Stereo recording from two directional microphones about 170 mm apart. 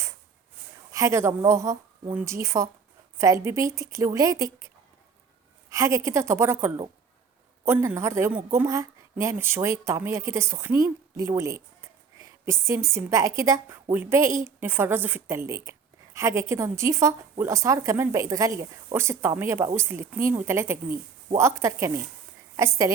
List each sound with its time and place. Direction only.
0.9 s a woman's voice: 15° right (ahead or behind)
5.7 s a woman's voice: 20° right (ahead or behind)